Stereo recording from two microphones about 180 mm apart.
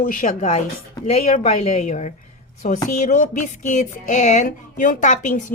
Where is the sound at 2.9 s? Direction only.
45° left (ahead or behind).